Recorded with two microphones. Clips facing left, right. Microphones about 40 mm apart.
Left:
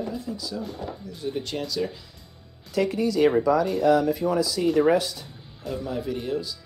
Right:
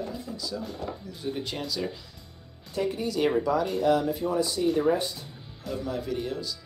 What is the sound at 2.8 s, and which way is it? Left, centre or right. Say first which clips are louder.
Speech: left 4 dB; left.